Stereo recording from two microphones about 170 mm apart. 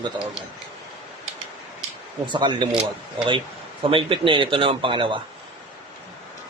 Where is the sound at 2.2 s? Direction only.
30° right (ahead or behind).